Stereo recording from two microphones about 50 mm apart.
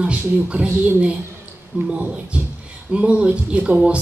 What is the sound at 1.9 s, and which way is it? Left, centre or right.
Speech, right.